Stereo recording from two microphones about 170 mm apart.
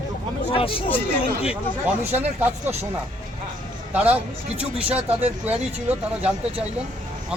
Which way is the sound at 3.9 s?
10° right (ahead or behind).